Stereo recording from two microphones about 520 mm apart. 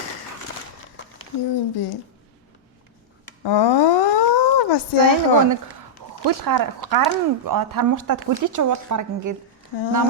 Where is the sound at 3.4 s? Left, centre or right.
Left.